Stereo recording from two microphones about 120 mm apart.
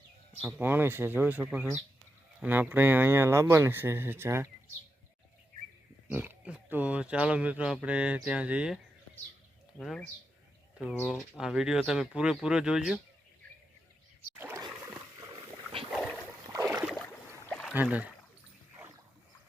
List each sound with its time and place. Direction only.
0.4 s speech: 15° right (ahead or behind)
6.1 s speech: 15° right (ahead or behind)
9.8 s speech: 5° left (ahead or behind)
11.1 s speech: centre (ahead or behind)
15.5 s boat: 50° right (ahead or behind)
15.9 s boat: centre (ahead or behind)
16.6 s boat: 15° right (ahead or behind)
17.5 s boat: 5° left (ahead or behind)
17.7 s speech: 10° right (ahead or behind)